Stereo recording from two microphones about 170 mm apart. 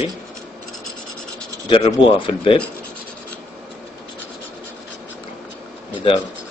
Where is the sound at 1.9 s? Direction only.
30° left (ahead or behind).